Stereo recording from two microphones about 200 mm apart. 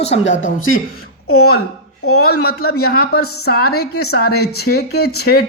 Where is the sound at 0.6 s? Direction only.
90° left.